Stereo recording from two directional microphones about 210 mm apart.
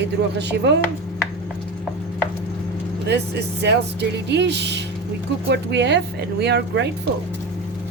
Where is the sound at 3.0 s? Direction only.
50° right (ahead or behind).